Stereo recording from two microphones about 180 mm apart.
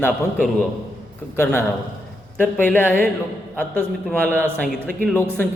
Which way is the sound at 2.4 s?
10° left (ahead or behind).